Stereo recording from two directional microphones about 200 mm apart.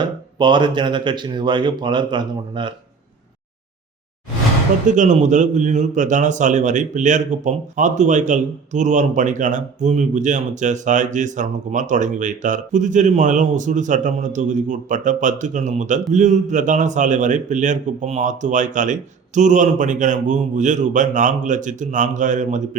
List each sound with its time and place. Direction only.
0.0 s speech: 20° right (ahead or behind)
4.9 s a man's voice: 40° right (ahead or behind)